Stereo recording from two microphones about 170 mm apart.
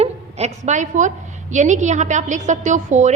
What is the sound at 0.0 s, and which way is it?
A woman's voice, 40° right (ahead or behind).